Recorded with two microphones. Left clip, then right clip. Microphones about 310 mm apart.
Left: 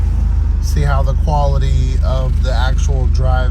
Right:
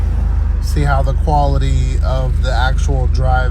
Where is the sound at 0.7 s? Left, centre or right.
Centre.